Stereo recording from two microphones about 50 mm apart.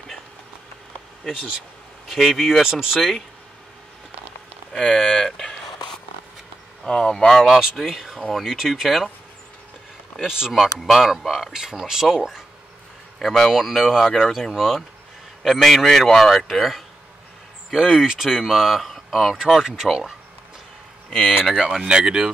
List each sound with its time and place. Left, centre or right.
2.0 s speech: centre
4.9 s a sound: centre
6.8 s speech: centre
10.2 s speech: centre
10.5 s speech: centre
21.1 s speech: centre
21.7 s speech: centre